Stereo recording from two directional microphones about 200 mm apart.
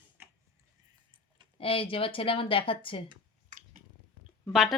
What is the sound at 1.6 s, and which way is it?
A woman's voice, 25° left (ahead or behind).